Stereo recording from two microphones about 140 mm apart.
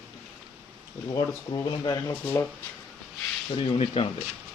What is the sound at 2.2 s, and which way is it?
Speech, 15° left (ahead or behind).